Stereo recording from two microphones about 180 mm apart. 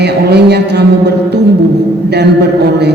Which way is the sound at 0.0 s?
65° right (ahead or behind).